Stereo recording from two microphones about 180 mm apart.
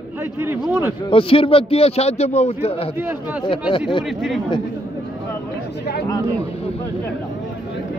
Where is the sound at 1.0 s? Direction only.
30° left (ahead or behind).